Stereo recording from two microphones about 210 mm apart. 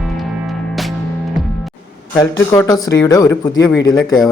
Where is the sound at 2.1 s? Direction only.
15° left (ahead or behind).